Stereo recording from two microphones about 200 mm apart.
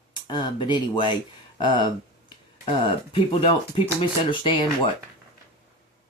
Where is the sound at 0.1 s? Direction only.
20° left (ahead or behind).